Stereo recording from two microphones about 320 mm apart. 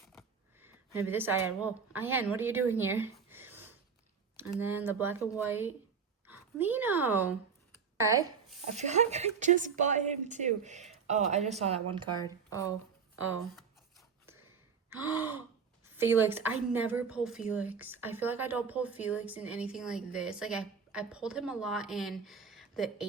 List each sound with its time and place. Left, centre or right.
0.1 s a sound: centre
4.4 s speech: centre
8.7 s a woman's voice: right
12.2 s speech: centre
14.8 s gasp: centre
16.0 s a woman's voice: centre